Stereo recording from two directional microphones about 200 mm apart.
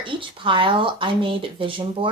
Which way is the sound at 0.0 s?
25° right (ahead or behind).